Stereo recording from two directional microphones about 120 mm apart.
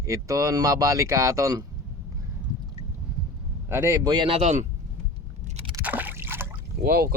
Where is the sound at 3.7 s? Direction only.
20° right (ahead or behind).